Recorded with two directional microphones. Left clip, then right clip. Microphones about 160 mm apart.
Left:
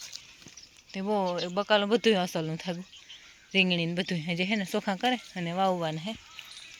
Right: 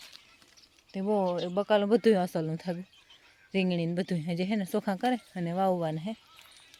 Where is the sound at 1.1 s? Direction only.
30° right (ahead or behind).